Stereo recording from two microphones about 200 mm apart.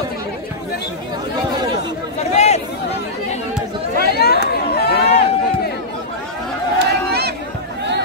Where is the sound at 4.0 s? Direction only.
50° left (ahead or behind).